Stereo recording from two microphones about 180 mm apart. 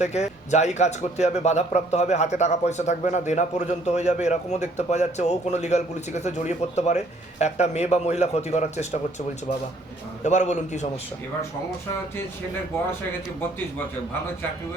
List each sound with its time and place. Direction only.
0.0 s speech: 40° left (ahead or behind)
10.2 s speech: 40° left (ahead or behind)